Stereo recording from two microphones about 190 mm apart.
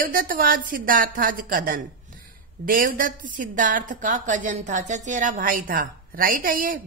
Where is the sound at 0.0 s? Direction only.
50° right (ahead or behind).